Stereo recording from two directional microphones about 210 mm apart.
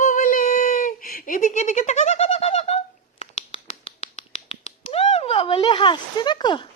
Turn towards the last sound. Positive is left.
turn(degrees=20)  # may be behind; listen again after turning